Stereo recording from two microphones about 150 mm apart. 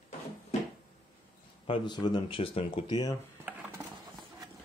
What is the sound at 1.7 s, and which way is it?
Speech, 30° left (ahead or behind).